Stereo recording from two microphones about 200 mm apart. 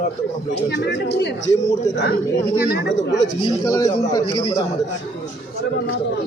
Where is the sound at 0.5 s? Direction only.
60° left (ahead or behind).